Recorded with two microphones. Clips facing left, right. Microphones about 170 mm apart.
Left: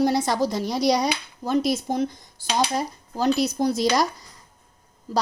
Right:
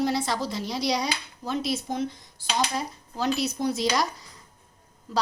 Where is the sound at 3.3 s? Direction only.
40° left (ahead or behind).